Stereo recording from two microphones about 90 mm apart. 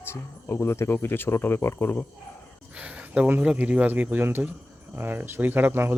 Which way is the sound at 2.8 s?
15° right (ahead or behind).